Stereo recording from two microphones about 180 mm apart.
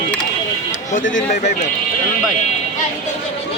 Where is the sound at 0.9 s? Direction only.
45° left (ahead or behind).